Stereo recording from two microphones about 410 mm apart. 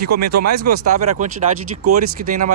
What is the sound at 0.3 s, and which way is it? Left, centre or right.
Speech, right.